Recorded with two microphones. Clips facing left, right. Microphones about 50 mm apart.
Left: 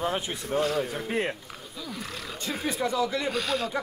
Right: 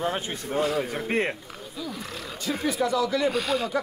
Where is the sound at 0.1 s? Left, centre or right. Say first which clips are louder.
Even; right.